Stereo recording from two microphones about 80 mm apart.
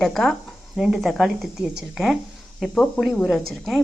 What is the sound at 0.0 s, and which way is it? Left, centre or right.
Speech, centre.